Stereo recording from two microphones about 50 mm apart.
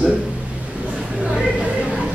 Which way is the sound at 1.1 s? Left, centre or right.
Right.